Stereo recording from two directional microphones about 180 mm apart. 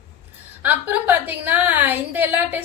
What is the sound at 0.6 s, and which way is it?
A woman's voice, 10° right (ahead or behind).